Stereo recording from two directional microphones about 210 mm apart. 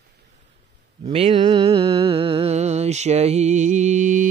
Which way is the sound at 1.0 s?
25° right (ahead or behind).